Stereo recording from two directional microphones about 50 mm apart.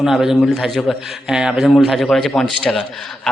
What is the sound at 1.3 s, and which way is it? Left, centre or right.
Speech, centre.